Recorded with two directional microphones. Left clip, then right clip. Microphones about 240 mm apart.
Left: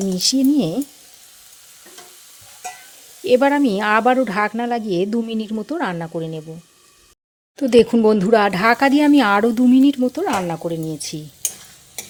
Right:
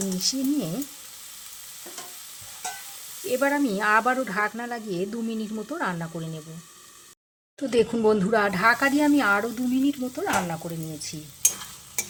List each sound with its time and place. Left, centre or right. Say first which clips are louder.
0.2 s speech: left 10 dB; left
3.2 s speech: left 9 dB; left
7.6 s speech: left 9 dB; left